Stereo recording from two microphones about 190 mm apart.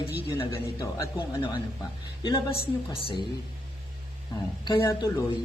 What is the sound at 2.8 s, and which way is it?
Speech, 25° left (ahead or behind).